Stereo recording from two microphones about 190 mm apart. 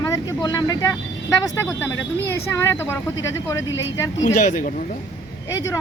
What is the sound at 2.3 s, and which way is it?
Speech, 15° left (ahead or behind).